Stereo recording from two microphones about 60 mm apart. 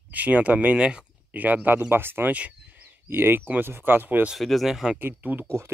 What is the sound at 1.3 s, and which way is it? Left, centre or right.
Speech, right.